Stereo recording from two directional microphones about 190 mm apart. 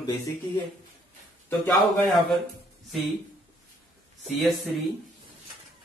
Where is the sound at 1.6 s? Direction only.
Centre (ahead or behind).